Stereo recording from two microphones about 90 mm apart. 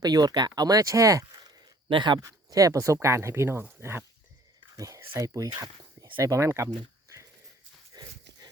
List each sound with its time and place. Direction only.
0.0 s speech: 45° right (ahead or behind)
1.9 s speech: 65° right (ahead or behind)
2.2 s speech: 40° right (ahead or behind)
7.9 s dog: 50° right (ahead or behind)